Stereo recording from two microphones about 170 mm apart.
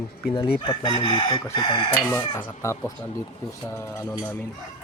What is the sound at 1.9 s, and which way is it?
Speech, 10° left (ahead or behind).